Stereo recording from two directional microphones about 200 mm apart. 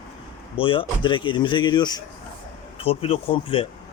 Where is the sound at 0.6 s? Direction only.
25° left (ahead or behind).